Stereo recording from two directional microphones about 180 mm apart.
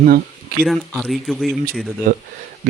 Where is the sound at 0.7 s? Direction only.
Centre (ahead or behind).